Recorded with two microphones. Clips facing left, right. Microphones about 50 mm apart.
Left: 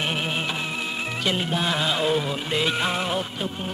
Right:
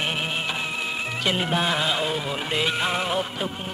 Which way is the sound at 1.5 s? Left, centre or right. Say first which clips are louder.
Right 1 dB; centre.